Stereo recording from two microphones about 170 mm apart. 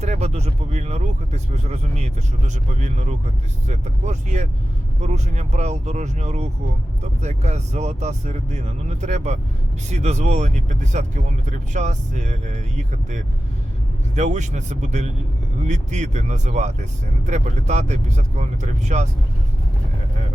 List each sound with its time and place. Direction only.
0.0 s speech: 40° right (ahead or behind)